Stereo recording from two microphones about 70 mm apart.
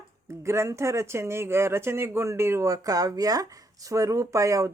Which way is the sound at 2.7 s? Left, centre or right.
Right.